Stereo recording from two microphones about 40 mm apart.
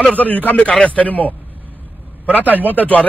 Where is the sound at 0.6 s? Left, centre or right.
Left.